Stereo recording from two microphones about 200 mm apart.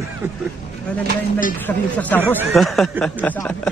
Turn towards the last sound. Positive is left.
turn(degrees=5)  # may be behind; listen again after turning